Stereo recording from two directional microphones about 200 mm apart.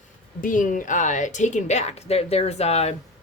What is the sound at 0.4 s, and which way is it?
A woman's voice, 40° left (ahead or behind).